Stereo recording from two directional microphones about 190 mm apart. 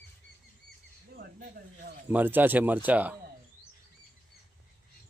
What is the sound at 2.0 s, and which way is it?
Speech, 10° right (ahead or behind).